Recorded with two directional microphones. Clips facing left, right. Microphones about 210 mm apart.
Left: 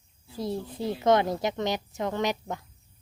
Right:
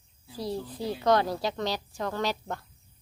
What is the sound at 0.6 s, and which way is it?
A woman's voice, 20° left (ahead or behind).